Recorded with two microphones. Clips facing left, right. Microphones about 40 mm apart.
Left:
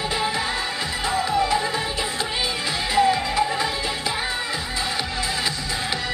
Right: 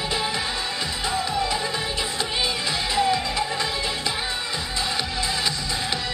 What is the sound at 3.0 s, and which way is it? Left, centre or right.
Music, centre.